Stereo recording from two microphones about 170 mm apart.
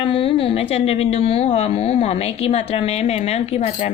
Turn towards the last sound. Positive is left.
turn(degrees=40)  # may be behind; listen again after turning